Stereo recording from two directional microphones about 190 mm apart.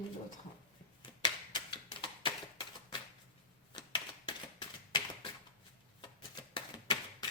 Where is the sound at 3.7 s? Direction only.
25° left (ahead or behind).